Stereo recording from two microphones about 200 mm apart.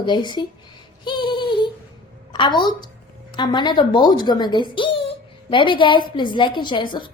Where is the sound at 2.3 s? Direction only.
25° left (ahead or behind).